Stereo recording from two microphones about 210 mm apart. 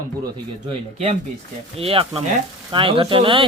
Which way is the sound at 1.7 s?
25° right (ahead or behind).